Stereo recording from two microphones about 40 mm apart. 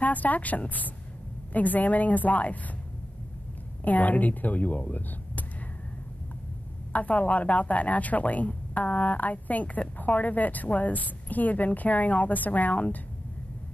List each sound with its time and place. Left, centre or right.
0.0 s a woman's voice: left
3.8 s speech: left
6.9 s a woman's voice: left